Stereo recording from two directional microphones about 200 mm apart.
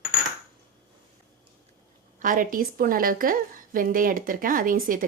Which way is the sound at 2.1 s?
40° right (ahead or behind).